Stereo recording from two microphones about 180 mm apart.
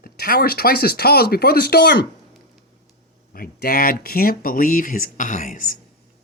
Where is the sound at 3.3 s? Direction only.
55° left (ahead or behind).